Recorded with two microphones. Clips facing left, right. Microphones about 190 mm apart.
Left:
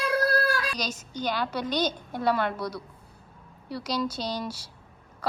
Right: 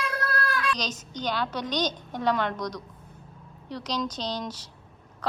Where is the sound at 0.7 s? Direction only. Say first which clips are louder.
Left 1 dB; 10° left (ahead or behind).